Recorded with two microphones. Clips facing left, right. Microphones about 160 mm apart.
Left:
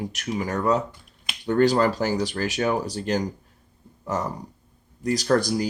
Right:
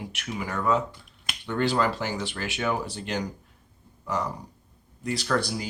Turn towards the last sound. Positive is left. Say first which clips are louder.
# left 6 dB
turn(degrees=40)  # may be behind; listen again after turning